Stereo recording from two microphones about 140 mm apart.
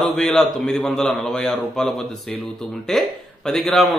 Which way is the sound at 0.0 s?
5° left (ahead or behind).